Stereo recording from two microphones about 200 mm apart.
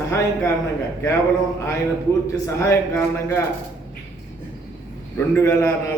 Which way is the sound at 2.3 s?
15° left (ahead or behind).